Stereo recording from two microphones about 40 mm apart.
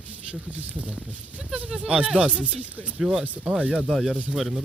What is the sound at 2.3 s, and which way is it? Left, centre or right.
Speech, right.